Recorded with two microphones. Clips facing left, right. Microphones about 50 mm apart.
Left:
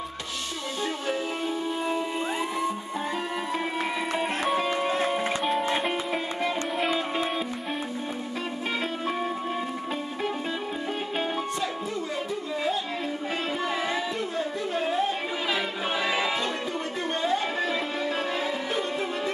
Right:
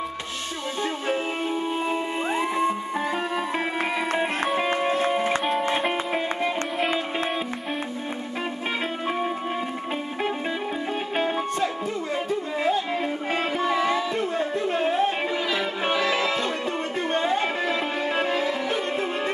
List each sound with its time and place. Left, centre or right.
1.9 s music: right
5.0 s music: centre
5.4 s music: centre
5.7 s music: centre
14.3 s a sound: right
16.0 s music: centre
17.1 s music: right
17.6 s music: right